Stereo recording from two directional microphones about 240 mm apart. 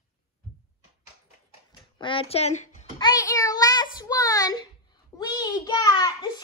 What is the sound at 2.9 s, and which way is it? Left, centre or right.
A child's voice, centre.